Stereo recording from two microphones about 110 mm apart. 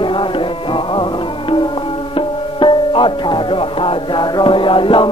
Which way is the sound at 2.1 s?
50° left (ahead or behind).